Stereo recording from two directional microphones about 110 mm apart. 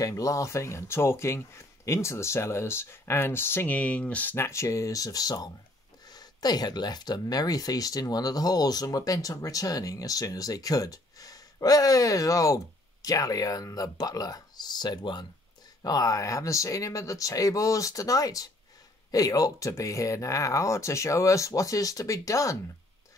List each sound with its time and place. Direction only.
0.0 s speech: 30° left (ahead or behind)